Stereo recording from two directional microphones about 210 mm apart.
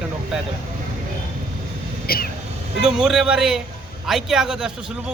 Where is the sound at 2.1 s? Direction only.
45° left (ahead or behind).